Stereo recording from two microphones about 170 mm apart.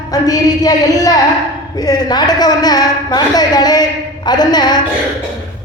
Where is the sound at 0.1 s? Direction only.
20° left (ahead or behind).